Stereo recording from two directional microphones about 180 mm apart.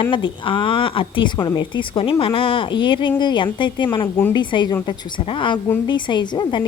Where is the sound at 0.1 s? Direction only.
30° left (ahead or behind).